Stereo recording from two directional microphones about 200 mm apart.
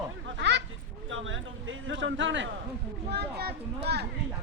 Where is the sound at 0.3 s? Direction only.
60° right (ahead or behind).